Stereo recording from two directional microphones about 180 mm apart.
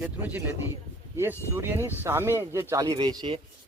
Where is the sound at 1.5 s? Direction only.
15° right (ahead or behind).